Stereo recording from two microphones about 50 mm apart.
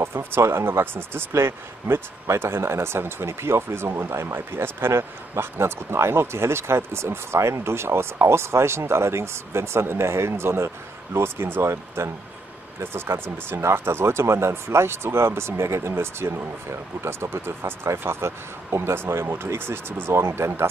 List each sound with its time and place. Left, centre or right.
0.0 s speech: right
11.1 s speech: right
11.6 s speech: right
15.9 s speech: right